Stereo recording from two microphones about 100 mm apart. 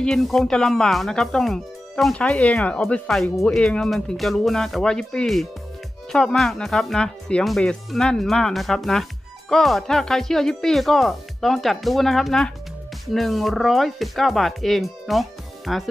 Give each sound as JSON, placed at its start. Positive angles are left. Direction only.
{"t": 0.0, "sound": "speech", "side_deg": 5}